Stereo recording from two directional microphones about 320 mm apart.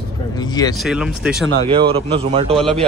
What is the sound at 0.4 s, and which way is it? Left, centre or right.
Speech, centre.